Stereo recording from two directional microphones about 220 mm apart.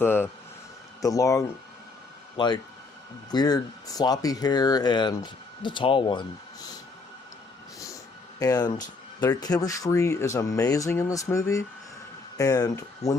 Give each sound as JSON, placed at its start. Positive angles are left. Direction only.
{"t": 0.0, "sound": "speech", "side_deg": 10}
{"t": 8.4, "sound": "speech", "side_deg": 15}